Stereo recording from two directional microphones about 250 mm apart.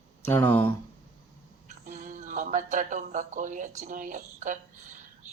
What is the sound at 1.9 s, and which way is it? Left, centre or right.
A woman's voice, right.